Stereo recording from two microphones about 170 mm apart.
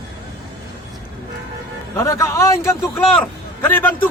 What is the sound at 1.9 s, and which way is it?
A man's voice, 15° left (ahead or behind).